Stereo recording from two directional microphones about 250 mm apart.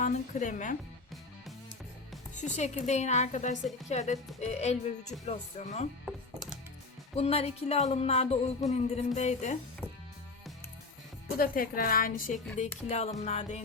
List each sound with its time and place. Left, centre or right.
0.0 s a woman's voice: left
2.3 s a woman's voice: left
7.2 s a woman's voice: left
11.3 s a woman's voice: left